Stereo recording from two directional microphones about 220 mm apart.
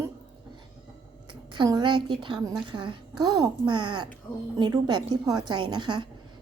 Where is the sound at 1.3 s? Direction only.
20° right (ahead or behind).